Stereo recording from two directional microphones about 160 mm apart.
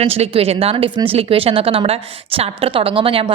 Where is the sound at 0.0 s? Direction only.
40° right (ahead or behind).